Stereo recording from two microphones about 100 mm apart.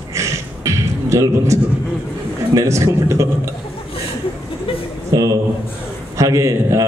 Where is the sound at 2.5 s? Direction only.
30° right (ahead or behind).